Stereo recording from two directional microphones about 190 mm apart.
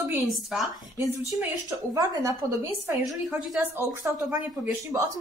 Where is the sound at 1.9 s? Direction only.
15° right (ahead or behind).